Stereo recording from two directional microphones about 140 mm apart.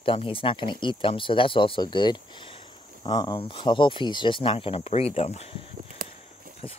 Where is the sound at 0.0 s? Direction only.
40° left (ahead or behind).